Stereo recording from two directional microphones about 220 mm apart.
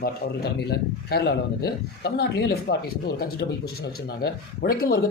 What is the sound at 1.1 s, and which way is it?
A man's voice, 50° left (ahead or behind).